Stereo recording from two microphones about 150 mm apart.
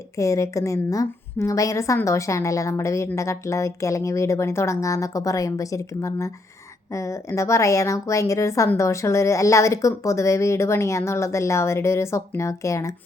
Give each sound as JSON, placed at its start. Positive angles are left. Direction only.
{"t": 0.2, "sound": "a woman's voice", "side_deg": 20}